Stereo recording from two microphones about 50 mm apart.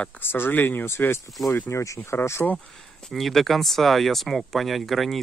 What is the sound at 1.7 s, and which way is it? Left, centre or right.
Speech, left.